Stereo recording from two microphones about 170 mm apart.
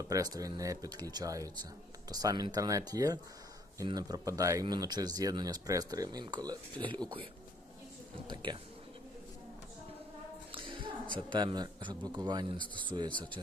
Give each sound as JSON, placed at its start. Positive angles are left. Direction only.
{"t": 0.0, "sound": "speech", "side_deg": -20}
{"t": 8.3, "sound": "speech", "side_deg": -25}
{"t": 10.5, "sound": "a sound", "side_deg": -30}
{"t": 11.1, "sound": "speech", "side_deg": -30}